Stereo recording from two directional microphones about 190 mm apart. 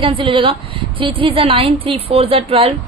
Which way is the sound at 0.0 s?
25° right (ahead or behind).